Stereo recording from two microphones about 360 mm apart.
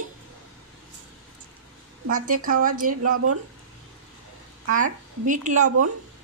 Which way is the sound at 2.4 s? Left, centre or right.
Right.